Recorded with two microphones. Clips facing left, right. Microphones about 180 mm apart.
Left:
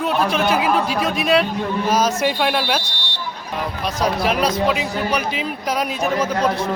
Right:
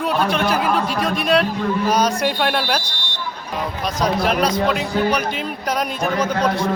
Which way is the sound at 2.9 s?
50° right (ahead or behind).